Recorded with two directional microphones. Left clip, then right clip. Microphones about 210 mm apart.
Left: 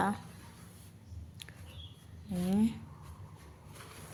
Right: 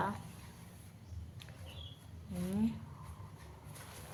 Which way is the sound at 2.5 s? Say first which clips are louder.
Left 5 dB; 40° left (ahead or behind).